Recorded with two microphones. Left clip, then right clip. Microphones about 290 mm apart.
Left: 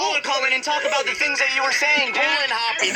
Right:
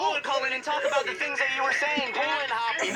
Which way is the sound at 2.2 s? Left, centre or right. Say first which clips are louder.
Left 7 dB; left.